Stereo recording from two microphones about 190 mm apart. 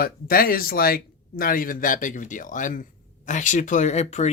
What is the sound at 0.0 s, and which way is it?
Speech, 50° left (ahead or behind).